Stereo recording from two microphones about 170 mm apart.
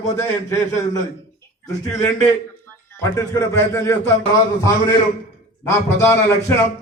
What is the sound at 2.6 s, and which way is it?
Speech, 20° left (ahead or behind).